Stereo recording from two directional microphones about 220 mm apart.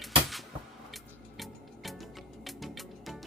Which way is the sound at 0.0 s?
Centre (ahead or behind).